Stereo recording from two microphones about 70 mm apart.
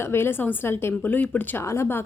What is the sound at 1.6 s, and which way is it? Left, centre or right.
Speech, left.